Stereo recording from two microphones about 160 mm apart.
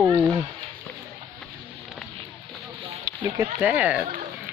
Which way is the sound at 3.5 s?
10° right (ahead or behind).